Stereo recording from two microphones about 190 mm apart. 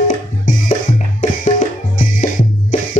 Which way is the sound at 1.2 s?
40° left (ahead or behind).